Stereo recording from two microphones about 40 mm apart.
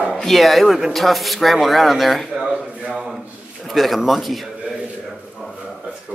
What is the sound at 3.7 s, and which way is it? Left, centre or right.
Speech, centre.